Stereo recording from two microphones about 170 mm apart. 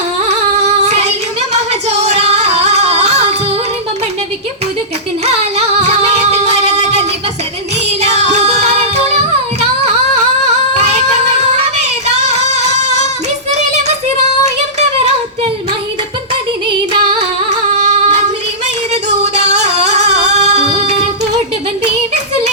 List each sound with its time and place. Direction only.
0.3 s female singing: 40° right (ahead or behind)
5.2 s music: 40° right (ahead or behind)
8.0 s music: 40° right (ahead or behind)
10.8 s singing: 40° right (ahead or behind)
11.8 s music: 40° right (ahead or behind)
13.5 s a sound: 40° right (ahead or behind)
17.7 s female singing: 40° right (ahead or behind)
19.6 s music: 40° right (ahead or behind)